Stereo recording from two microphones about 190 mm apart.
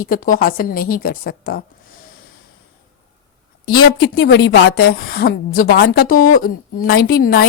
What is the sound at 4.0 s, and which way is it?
A woman's voice, 75° left (ahead or behind).